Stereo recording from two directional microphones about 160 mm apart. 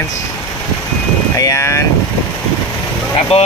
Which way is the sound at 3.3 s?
40° left (ahead or behind).